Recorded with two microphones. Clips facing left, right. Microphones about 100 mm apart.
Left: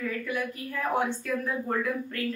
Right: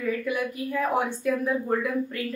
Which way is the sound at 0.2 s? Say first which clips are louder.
Right 4 dB; 10° right (ahead or behind).